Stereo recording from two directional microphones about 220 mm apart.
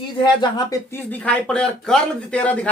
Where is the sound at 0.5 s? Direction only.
15° left (ahead or behind).